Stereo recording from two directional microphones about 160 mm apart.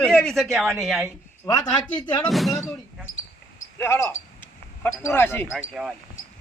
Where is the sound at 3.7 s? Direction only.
15° left (ahead or behind).